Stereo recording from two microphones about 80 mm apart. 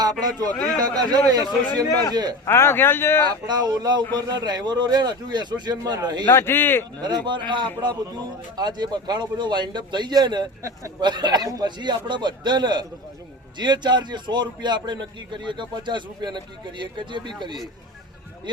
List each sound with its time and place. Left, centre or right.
0.0 s a man's voice: right
2.5 s speech: left
3.2 s a man's voice: right
6.2 s speech: left
7.0 s a man's voice: right
8.5 s a man's voice: right
10.6 s speech: right
11.0 s a man's voice: right
11.4 s speech: right
11.8 s a man's voice: right